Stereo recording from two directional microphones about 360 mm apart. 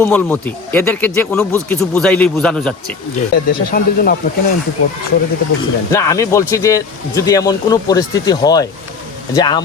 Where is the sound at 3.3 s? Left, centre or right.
Left.